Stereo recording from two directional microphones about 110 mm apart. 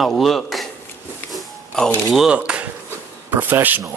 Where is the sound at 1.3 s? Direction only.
5° left (ahead or behind).